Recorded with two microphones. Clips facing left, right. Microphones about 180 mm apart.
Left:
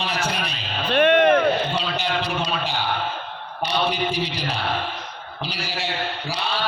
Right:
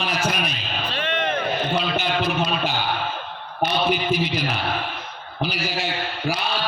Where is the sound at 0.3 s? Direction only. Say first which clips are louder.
Right 2 dB; 30° left (ahead or behind).